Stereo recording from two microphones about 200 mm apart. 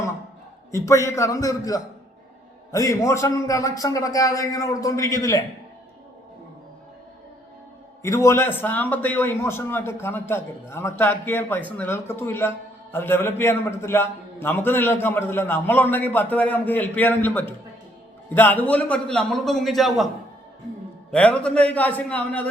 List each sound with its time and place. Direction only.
0.7 s a man's voice: 15° left (ahead or behind)
8.0 s a man's voice: 15° left (ahead or behind)
21.1 s a man's voice: 5° left (ahead or behind)